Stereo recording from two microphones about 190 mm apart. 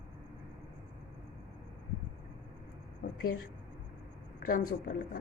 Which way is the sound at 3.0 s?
45° left (ahead or behind).